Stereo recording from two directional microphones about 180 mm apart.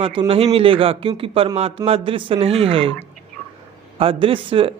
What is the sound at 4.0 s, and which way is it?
Speech, 30° right (ahead or behind).